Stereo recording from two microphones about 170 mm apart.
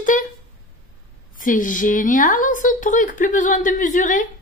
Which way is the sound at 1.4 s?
50° left (ahead or behind).